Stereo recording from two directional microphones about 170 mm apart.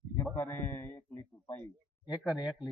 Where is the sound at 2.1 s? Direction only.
5° right (ahead or behind).